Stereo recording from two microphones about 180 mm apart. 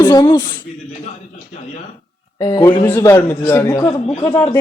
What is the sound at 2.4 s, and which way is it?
A man's voice, 20° left (ahead or behind).